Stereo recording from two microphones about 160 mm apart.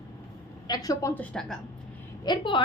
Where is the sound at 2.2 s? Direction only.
30° left (ahead or behind).